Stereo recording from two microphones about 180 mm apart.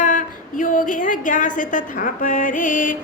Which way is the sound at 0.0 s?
45° left (ahead or behind).